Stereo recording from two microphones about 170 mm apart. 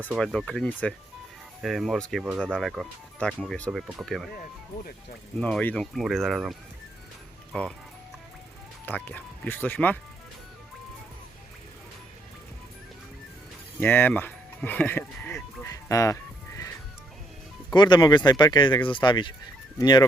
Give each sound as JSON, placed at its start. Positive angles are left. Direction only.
{"t": 0.2, "sound": "speech", "side_deg": 5}
{"t": 5.4, "sound": "speech", "side_deg": 5}
{"t": 8.9, "sound": "speech", "side_deg": 10}
{"t": 13.7, "sound": "speech", "side_deg": 10}
{"t": 17.7, "sound": "speech", "side_deg": 25}